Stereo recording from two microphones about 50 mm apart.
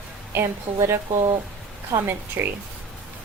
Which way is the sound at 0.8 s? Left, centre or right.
Right.